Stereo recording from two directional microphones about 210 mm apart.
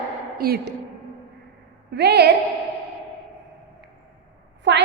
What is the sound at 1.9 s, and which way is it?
Speech, 50° right (ahead or behind).